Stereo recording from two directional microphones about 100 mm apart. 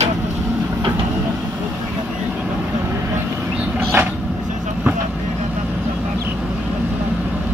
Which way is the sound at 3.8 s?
20° right (ahead or behind).